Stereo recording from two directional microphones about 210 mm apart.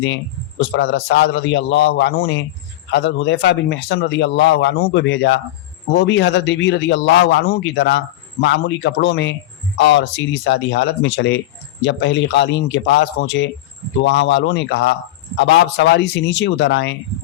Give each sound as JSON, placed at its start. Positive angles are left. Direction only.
{"t": 0.8, "sound": "a man's voice", "side_deg": 55}